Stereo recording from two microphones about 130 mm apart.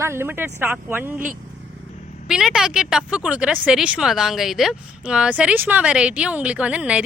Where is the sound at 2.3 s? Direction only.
5° right (ahead or behind).